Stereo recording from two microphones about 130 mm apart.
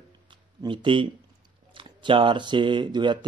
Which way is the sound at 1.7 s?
40° right (ahead or behind).